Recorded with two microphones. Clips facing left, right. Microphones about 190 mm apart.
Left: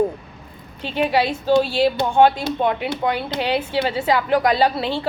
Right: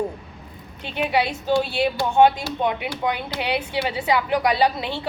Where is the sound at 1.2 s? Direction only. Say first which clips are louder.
Left 5 dB; 25° left (ahead or behind).